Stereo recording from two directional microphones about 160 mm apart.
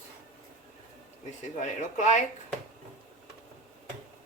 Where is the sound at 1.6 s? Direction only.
50° left (ahead or behind).